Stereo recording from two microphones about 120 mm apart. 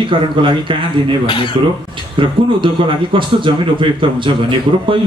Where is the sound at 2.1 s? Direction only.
45° right (ahead or behind).